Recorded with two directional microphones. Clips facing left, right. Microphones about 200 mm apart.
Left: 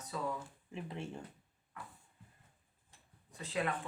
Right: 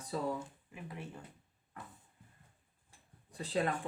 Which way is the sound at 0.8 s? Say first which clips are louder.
Left 1 dB; 25° left (ahead or behind).